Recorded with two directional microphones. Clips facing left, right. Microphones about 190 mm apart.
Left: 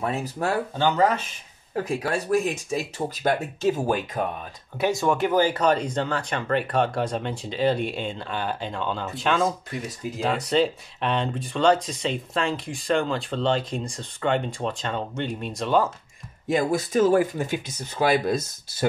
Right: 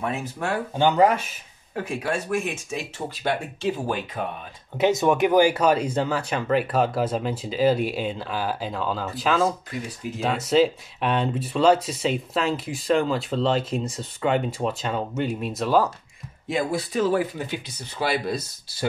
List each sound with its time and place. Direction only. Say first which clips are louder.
0.0 s speech: left 2 dB; 35° left (ahead or behind)
0.7 s speech: right 4 dB; 15° right (ahead or behind)
1.9 s speech: left 2 dB; 35° left (ahead or behind)
4.7 s speech: right 3 dB; 20° right (ahead or behind); by 15.9 s 5° right (ahead or behind)
16.4 s speech: left 2 dB; 45° left (ahead or behind)